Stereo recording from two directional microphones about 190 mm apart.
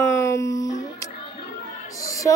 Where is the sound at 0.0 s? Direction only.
15° left (ahead or behind).